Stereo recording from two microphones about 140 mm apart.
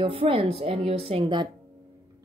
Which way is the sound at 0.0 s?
40° right (ahead or behind).